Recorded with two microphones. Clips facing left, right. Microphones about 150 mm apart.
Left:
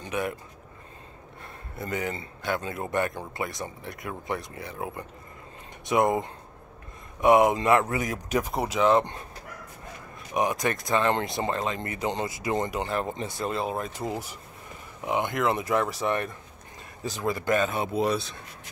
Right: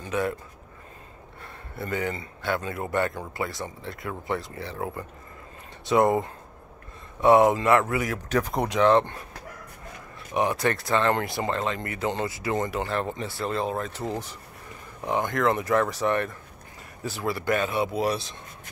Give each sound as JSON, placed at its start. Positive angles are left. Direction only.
{"t": 0.0, "sound": "speech", "side_deg": 20}
{"t": 1.8, "sound": "speech", "side_deg": 20}
{"t": 8.3, "sound": "speech", "side_deg": 5}
{"t": 10.3, "sound": "speech", "side_deg": 15}